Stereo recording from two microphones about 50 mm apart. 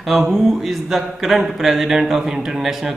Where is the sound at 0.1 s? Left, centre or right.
Centre.